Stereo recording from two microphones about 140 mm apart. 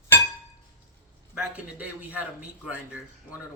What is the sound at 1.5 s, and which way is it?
A man's voice, 10° right (ahead or behind).